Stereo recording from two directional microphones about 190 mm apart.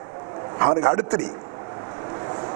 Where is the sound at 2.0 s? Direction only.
30° right (ahead or behind).